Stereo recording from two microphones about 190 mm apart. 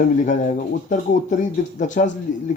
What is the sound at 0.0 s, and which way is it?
Speech, 40° left (ahead or behind).